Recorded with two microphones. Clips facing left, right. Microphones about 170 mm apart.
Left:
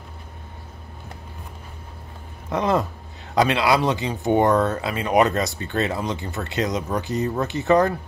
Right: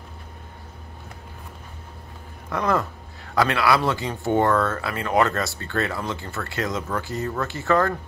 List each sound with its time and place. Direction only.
2.5 s speech: 20° left (ahead or behind)